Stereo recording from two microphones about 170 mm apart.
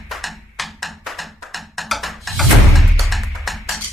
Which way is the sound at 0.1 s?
Centre (ahead or behind).